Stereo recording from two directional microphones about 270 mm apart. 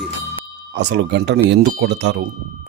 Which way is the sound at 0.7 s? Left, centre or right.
Right.